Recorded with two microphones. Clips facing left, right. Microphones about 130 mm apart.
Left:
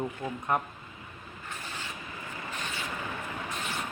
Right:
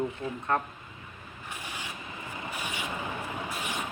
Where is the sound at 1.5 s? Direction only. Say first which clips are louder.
Right 1 dB; 15° right (ahead or behind).